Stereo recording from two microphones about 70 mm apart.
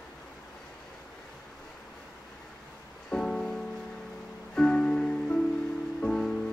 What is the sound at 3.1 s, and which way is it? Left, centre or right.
Music, centre.